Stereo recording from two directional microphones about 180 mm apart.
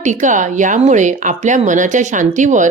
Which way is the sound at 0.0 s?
45° right (ahead or behind).